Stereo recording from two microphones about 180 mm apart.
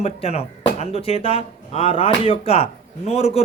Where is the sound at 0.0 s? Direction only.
35° left (ahead or behind).